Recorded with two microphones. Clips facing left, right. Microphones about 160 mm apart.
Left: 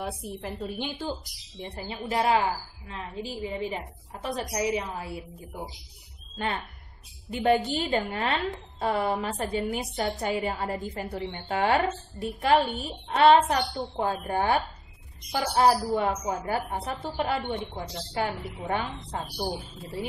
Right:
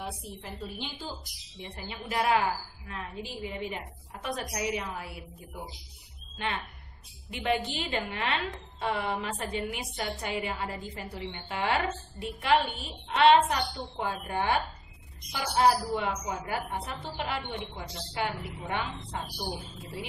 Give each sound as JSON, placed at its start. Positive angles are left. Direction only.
{"t": 0.0, "sound": "a woman's voice", "side_deg": 55}
{"t": 1.6, "sound": "a woman's voice", "side_deg": 35}
{"t": 6.3, "sound": "a woman's voice", "side_deg": 40}